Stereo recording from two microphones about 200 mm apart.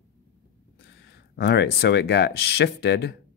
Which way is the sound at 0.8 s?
55° left (ahead or behind).